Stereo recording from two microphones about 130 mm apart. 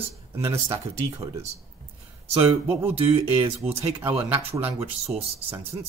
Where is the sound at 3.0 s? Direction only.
45° right (ahead or behind).